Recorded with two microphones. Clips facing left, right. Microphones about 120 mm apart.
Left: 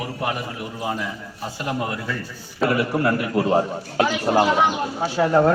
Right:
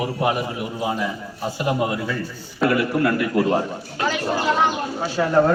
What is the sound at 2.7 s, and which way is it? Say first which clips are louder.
Speech: right 1 dB; 35° left (ahead or behind).